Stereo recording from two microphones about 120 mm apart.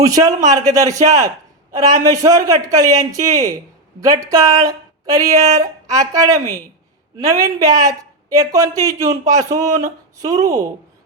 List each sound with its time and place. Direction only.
0.0 s speech: 30° right (ahead or behind)